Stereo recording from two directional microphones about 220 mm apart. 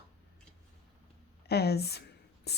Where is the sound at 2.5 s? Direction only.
45° left (ahead or behind).